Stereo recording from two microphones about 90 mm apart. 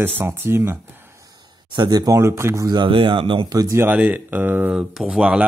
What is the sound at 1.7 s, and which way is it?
Speech, 50° right (ahead or behind).